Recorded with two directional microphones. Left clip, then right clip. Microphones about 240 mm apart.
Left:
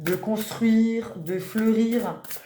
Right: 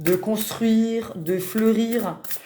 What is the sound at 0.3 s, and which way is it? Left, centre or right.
Speech, right.